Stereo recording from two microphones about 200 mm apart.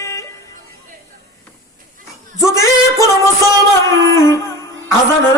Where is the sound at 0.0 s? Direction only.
15° left (ahead or behind).